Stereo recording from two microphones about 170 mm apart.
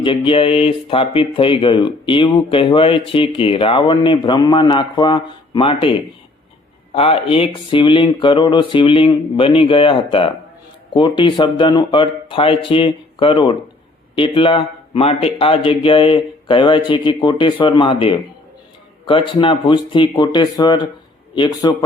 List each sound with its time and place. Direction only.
0.0 s speech: 30° left (ahead or behind)